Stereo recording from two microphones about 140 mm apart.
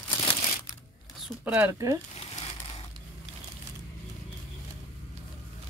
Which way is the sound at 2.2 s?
45° left (ahead or behind).